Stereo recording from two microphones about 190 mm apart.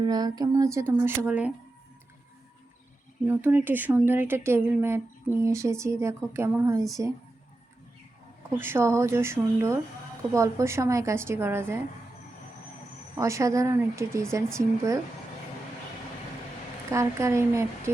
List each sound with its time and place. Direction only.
0.0 s speech: 20° right (ahead or behind)
3.2 s speech: 10° right (ahead or behind)
8.4 s speech: 10° right (ahead or behind)
13.1 s speech: 15° right (ahead or behind)
16.9 s speech: 15° right (ahead or behind)